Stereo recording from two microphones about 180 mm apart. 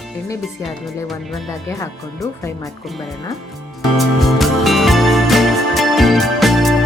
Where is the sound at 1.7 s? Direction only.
15° left (ahead or behind).